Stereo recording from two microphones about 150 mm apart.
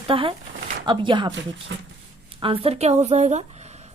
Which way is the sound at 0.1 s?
35° right (ahead or behind).